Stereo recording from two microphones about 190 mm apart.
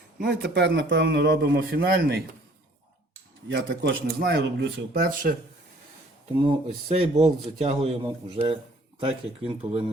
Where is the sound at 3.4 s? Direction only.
65° right (ahead or behind).